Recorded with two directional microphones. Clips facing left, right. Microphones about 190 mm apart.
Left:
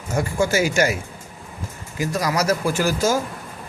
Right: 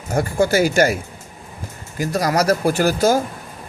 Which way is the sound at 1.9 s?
40° right (ahead or behind).